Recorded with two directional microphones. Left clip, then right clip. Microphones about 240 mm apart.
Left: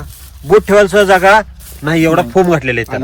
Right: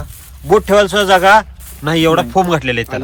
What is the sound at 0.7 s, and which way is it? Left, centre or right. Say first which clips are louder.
Speech: left 2 dB; centre.